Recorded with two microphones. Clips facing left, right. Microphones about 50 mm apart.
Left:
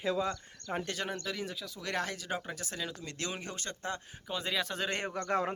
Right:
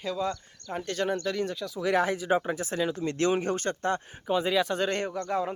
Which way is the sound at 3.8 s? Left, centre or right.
Right.